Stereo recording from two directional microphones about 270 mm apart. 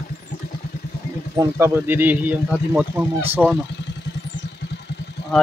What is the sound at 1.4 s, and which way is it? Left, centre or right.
Speech, centre.